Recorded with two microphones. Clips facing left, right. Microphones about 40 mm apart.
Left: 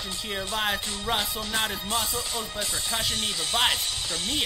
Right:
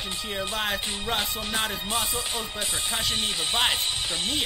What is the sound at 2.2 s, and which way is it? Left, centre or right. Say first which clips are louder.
Speech: right 1 dB; right.